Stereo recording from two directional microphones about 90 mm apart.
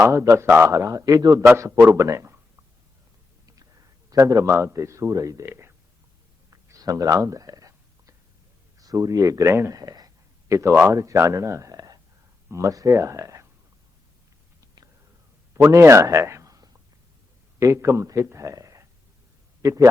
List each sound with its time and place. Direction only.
0.0 s a man's voice: 35° right (ahead or behind)
3.4 s whispering: 40° right (ahead or behind)
4.1 s a man's voice: 40° right (ahead or behind)
5.5 s speech: 25° right (ahead or behind)
6.5 s a sound: 40° right (ahead or behind)
8.8 s a man's voice: 40° right (ahead or behind)
10.5 s a man's voice: 30° right (ahead or behind)
15.5 s a man's voice: 30° right (ahead or behind)